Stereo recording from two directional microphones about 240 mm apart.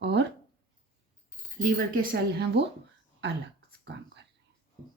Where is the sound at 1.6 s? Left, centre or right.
Right.